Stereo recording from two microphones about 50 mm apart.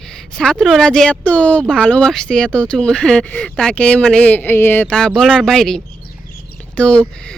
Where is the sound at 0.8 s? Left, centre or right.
Centre.